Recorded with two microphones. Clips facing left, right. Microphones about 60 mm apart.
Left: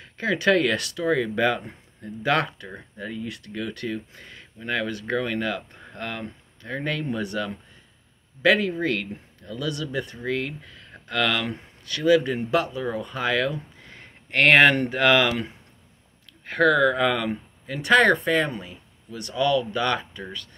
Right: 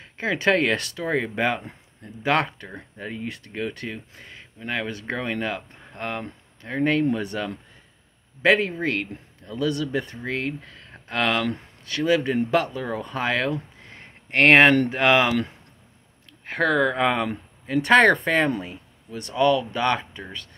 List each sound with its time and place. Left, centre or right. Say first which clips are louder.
0.0 s speech: even; right
16.4 s speech: left 2 dB; right